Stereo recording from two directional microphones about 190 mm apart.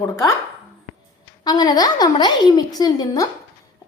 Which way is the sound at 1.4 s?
20° left (ahead or behind).